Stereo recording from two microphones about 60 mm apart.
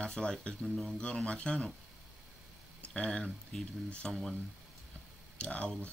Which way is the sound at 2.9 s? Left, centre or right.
Centre.